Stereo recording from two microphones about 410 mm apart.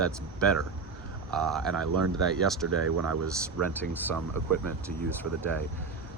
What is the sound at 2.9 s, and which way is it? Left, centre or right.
Speech, right.